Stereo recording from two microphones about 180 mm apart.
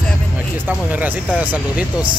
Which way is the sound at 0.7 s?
10° right (ahead or behind).